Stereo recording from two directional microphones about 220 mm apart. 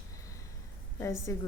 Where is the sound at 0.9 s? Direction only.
15° left (ahead or behind).